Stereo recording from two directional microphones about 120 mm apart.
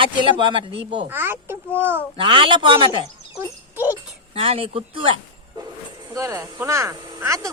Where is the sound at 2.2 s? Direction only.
45° right (ahead or behind).